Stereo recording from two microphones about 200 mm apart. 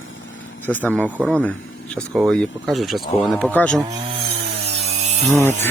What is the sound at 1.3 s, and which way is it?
Speech, 5° left (ahead or behind).